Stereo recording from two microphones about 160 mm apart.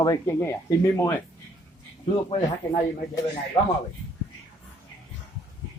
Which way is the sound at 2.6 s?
10° left (ahead or behind).